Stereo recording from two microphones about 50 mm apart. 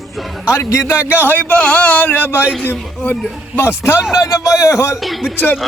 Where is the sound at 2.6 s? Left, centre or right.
Left.